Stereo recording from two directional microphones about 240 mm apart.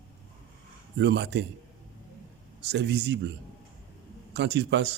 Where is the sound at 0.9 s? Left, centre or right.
Right.